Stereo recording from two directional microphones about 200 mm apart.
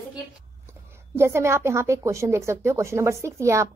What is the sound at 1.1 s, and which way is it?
A woman's voice, 15° right (ahead or behind).